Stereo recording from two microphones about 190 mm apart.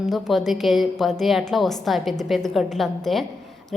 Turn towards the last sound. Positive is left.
turn(degrees=0)  # may be behind; listen again after turning